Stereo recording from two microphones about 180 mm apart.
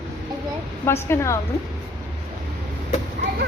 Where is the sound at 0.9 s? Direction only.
15° left (ahead or behind).